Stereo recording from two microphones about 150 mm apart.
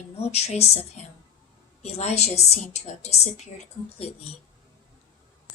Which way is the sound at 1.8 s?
45° left (ahead or behind).